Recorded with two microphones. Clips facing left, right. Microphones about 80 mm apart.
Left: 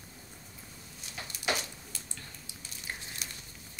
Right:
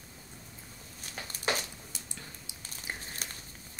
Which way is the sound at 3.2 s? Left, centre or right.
Right.